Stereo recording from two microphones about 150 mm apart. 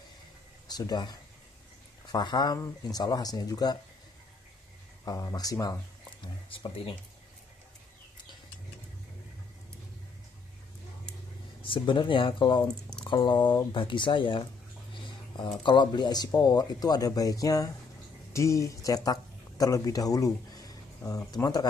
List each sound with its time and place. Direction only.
0.7 s speech: 25° left (ahead or behind)
5.0 s speech: 25° left (ahead or behind)
6.2 s speech: 35° left (ahead or behind)
11.6 s speech: 35° left (ahead or behind)
15.0 s a sound: 30° left (ahead or behind)
15.6 s speech: 30° left (ahead or behind)